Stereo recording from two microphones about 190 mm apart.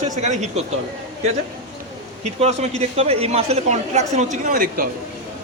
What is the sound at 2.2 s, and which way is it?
A man's voice, 35° right (ahead or behind).